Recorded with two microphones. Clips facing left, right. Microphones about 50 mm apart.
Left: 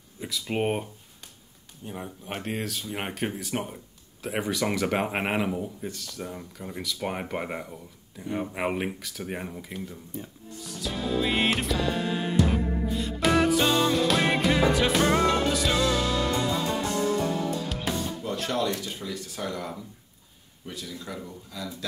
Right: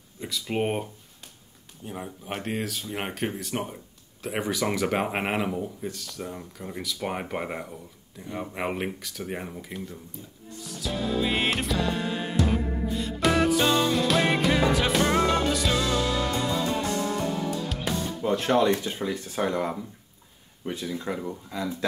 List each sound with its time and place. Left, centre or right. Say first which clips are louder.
0.2 s speech: even; centre
1.9 s speech: right 1 dB; centre
10.6 s music: right 1 dB; centre
17.6 s music: even; centre
18.4 s speech: right 6 dB; right